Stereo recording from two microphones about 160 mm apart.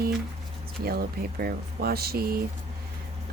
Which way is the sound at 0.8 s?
70° right (ahead or behind).